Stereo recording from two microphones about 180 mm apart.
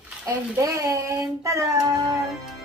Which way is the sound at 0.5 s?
20° right (ahead or behind).